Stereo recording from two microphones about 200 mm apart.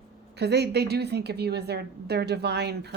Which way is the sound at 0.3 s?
55° right (ahead or behind).